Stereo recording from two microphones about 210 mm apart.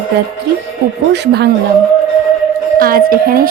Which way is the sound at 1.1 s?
50° right (ahead or behind).